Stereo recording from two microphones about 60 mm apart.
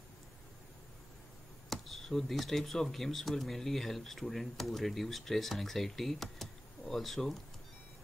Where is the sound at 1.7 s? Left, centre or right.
Centre.